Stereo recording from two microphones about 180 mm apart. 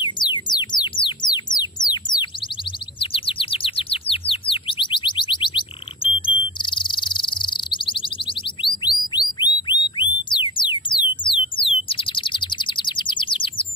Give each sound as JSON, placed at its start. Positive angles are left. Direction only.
{"t": 0.0, "sound": "music", "side_deg": 25}
{"t": 3.0, "sound": "chirp", "side_deg": 30}
{"t": 6.2, "sound": "bird", "side_deg": 25}
{"t": 9.1, "sound": "music", "side_deg": 25}
{"t": 11.5, "sound": "bird", "side_deg": 30}